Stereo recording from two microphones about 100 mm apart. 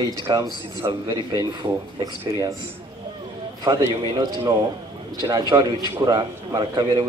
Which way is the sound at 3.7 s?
50° right (ahead or behind).